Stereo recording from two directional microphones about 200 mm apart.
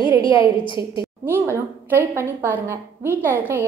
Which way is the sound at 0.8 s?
15° right (ahead or behind).